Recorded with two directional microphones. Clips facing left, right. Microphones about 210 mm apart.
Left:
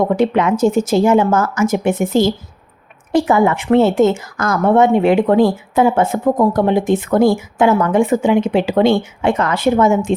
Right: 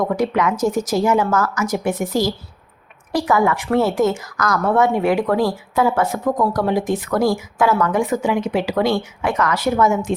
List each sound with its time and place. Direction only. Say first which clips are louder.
0.0 s a woman's voice: left 4 dB; 25° left (ahead or behind)